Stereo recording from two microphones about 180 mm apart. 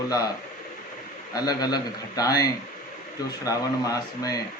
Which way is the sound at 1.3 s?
20° left (ahead or behind).